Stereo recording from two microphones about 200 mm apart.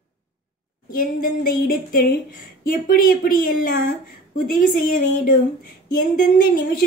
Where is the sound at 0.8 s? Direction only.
45° left (ahead or behind).